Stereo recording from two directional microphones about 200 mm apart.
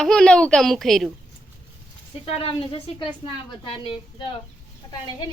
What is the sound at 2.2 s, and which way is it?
A woman's voice, 30° left (ahead or behind).